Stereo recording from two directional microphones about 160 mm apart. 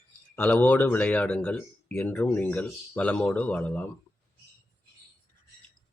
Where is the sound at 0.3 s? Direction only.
10° left (ahead or behind).